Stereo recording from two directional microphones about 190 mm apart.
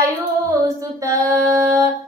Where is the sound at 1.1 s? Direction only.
15° right (ahead or behind).